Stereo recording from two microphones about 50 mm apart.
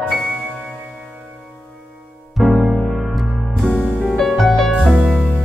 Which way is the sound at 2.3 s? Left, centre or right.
Centre.